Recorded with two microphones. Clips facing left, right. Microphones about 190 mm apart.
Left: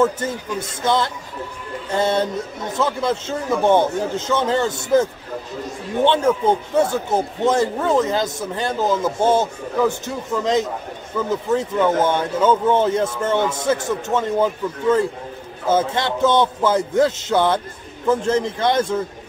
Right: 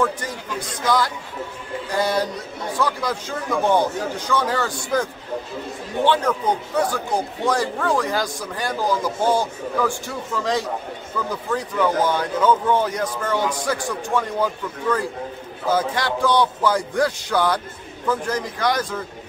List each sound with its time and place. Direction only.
0.0 s speech: 25° left (ahead or behind)
6.0 s speech: 25° left (ahead or behind)